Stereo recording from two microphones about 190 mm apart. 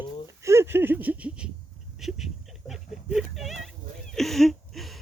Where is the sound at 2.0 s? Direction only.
Centre (ahead or behind).